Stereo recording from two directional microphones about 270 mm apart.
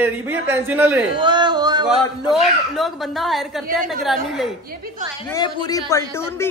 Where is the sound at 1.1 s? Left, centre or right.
Centre.